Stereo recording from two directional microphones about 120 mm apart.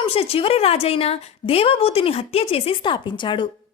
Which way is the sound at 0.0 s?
55° left (ahead or behind).